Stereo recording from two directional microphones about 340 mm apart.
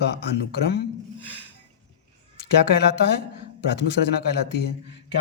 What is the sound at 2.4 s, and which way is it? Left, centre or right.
Speech, left.